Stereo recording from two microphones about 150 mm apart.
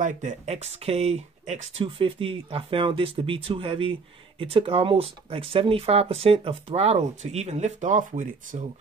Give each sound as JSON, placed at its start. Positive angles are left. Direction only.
{"t": 0.0, "sound": "speech", "side_deg": -55}